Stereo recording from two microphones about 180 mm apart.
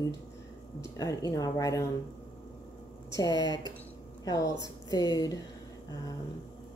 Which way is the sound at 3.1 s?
20° left (ahead or behind).